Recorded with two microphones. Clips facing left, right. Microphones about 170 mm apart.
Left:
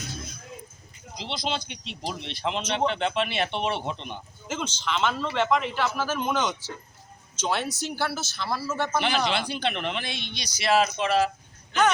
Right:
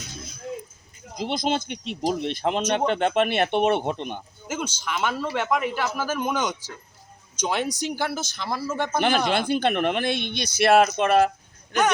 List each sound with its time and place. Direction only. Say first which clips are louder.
1.1 s speech: right 6 dB; 50° right (ahead or behind)
4.4 s a man's voice: right 1 dB; 10° right (ahead or behind)
9.0 s speech: right 5 dB; 50° right (ahead or behind)